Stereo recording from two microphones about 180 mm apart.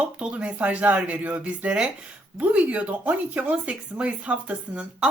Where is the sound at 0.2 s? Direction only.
5° right (ahead or behind).